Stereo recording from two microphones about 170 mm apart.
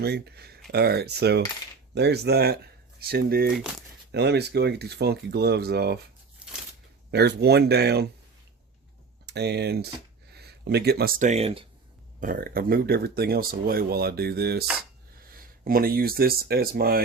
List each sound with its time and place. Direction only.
0.0 s speech: 70° right (ahead or behind)
3.5 s speech: centre (ahead or behind)
4.1 s speech: 75° right (ahead or behind)
6.4 s a sound: 5° right (ahead or behind)
7.1 s speech: 75° right (ahead or behind)
9.2 s speech: 75° right (ahead or behind)
10.3 s a sound: 75° right (ahead or behind)
11.2 s speech: 40° right (ahead or behind)
12.2 s speech: 55° right (ahead or behind)
15.2 s speech: 60° right (ahead or behind)